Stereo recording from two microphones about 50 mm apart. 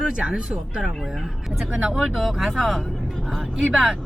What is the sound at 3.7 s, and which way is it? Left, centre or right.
Speech, centre.